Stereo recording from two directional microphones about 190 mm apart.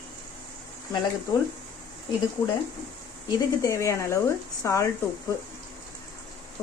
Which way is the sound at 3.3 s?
15° left (ahead or behind).